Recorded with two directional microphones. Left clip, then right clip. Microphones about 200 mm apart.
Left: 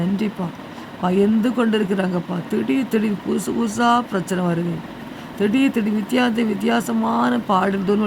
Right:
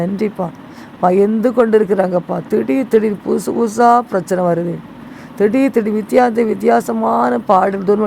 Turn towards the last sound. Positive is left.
turn(degrees=-25)  # may be behind; listen again after turning